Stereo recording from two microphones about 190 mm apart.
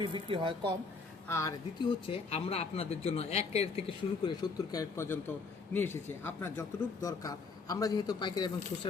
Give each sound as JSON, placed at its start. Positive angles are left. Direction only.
{"t": 0.0, "sound": "speech", "side_deg": -25}
{"t": 1.3, "sound": "speech", "side_deg": 15}